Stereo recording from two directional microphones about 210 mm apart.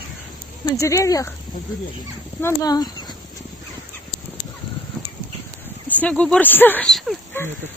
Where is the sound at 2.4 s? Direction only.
15° left (ahead or behind).